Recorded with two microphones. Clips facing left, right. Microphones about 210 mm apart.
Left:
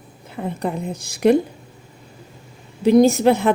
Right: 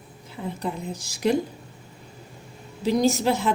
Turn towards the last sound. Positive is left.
turn(degrees=55)  # may be behind; listen again after turning